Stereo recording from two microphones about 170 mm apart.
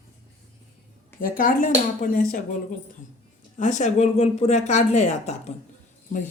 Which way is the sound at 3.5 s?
45° left (ahead or behind).